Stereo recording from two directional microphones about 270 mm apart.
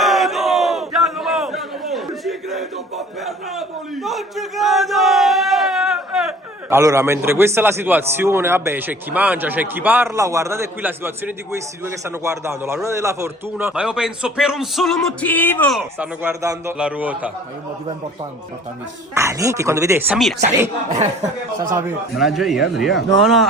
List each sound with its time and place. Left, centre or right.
0.0 s battle cry: centre
3.2 s speech: centre
16.0 s a man's voice: centre
19.1 s speech: centre
20.9 s speech: right
21.6 s a man's voice: centre